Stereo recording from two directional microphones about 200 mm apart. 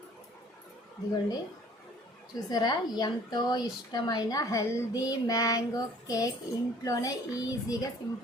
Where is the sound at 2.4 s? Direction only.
20° left (ahead or behind).